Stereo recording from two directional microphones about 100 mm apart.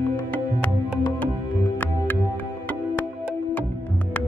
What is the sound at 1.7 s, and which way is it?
Music, 15° left (ahead or behind).